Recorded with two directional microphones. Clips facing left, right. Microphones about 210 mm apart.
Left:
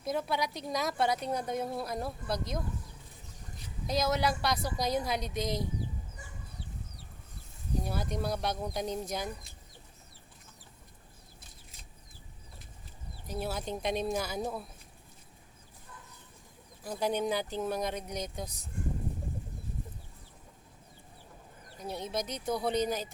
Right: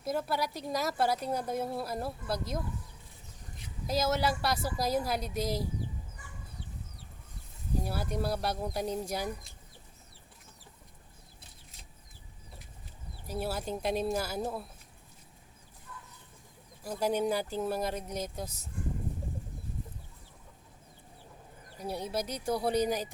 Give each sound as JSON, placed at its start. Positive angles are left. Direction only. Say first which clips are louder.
{"t": 0.0, "sound": "speech", "louder": "even", "side_deg": -5}
{"t": 3.8, "sound": "speech", "louder": "even", "side_deg": -5}
{"t": 7.9, "sound": "speech", "louder": "right 1 dB", "side_deg": -5}
{"t": 13.2, "sound": "speech", "louder": "right 1 dB", "side_deg": -5}
{"t": 15.9, "sound": "a sound", "louder": "right 3 dB", "side_deg": 25}
{"t": 16.8, "sound": "speech", "louder": "right 1 dB", "side_deg": -5}
{"t": 21.8, "sound": "speech", "louder": "right 1 dB", "side_deg": -10}